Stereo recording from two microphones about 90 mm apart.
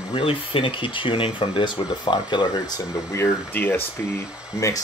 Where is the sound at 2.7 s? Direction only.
30° left (ahead or behind).